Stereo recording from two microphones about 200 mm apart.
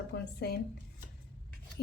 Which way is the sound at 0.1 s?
55° left (ahead or behind).